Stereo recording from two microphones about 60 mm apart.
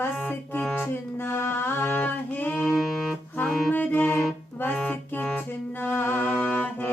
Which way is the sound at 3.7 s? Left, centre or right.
Left.